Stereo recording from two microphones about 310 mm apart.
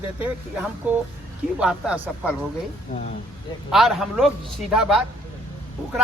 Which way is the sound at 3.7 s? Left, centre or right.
Centre.